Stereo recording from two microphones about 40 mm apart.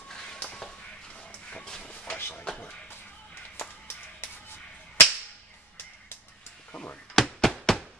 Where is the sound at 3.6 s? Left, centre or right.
Left.